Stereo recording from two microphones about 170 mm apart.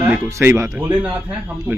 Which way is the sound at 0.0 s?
15° right (ahead or behind).